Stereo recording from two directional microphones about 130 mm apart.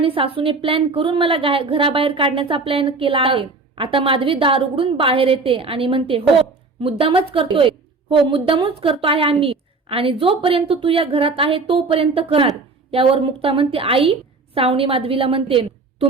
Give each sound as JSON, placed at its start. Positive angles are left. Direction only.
{"t": 0.0, "sound": "a woman's voice", "side_deg": -45}